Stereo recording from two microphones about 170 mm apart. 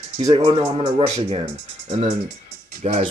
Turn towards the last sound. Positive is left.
turn(degrees=-40)  # may be behind; listen again after turning